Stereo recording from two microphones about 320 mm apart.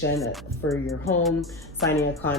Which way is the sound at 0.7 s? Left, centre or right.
Centre.